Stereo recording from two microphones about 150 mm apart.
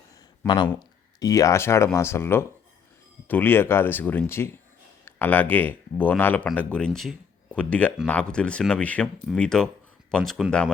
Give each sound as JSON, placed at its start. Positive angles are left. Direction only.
{"t": 0.4, "sound": "speech", "side_deg": 30}